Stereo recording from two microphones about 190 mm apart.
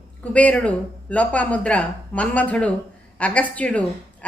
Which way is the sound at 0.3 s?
5° left (ahead or behind).